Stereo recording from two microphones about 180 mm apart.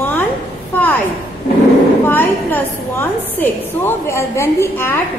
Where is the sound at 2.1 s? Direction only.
10° left (ahead or behind).